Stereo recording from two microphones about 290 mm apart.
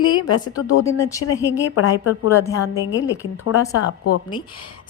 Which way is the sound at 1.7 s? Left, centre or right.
Left.